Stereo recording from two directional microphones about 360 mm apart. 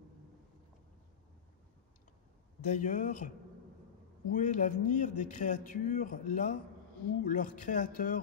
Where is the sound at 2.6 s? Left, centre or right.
Left.